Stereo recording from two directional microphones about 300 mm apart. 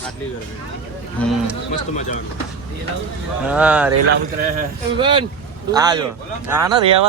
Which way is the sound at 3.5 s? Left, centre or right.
Centre.